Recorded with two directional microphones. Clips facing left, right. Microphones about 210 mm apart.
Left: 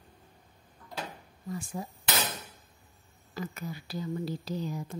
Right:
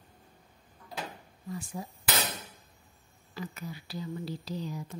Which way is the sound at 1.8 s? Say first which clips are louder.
Left 2 dB; 50° left (ahead or behind).